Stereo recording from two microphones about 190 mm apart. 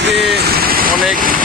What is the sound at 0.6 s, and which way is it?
Vehicle, 50° right (ahead or behind).